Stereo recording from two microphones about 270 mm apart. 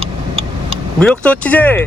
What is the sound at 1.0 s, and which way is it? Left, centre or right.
Speech, centre.